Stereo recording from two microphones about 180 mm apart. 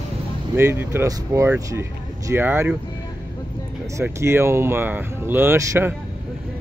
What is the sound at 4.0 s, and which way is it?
Speech, 15° right (ahead or behind).